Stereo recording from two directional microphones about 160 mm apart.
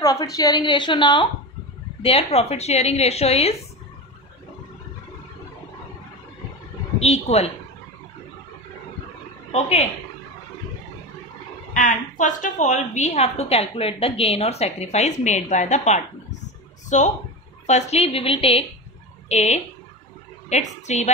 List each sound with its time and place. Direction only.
0.0 s a woman's voice: 20° left (ahead or behind); by 3.5 s 40° left (ahead or behind)
7.0 s speech: 40° left (ahead or behind)
9.5 s a woman's voice: 40° left (ahead or behind)
11.7 s a woman's voice: 55° left (ahead or behind)